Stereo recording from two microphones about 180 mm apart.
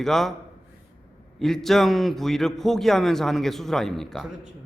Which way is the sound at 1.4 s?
Centre (ahead or behind).